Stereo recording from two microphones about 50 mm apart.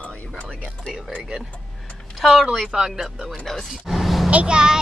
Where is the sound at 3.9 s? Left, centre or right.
Centre.